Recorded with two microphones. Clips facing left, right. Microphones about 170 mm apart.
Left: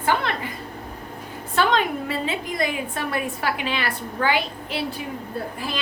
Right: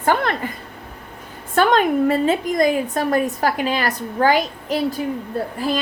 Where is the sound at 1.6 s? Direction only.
50° right (ahead or behind).